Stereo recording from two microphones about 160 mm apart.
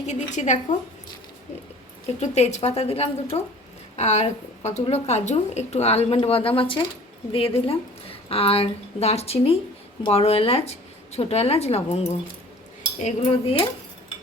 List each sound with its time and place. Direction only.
0.0 s a woman's voice: 50° left (ahead or behind)
2.2 s a woman's voice: 45° left (ahead or behind)